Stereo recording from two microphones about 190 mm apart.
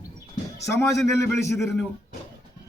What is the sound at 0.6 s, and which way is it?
Speech, 15° left (ahead or behind).